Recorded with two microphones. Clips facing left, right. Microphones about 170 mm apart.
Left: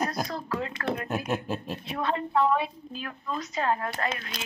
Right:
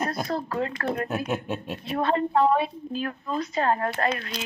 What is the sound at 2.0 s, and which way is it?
A woman's voice, 40° right (ahead or behind).